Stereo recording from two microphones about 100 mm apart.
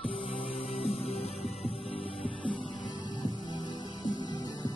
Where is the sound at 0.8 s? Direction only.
80° left.